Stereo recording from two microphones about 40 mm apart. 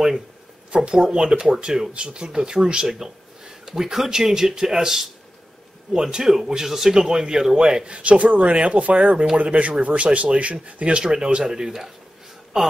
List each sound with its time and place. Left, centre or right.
0.7 s speech: centre
7.8 s speech: right; by 11.9 s centre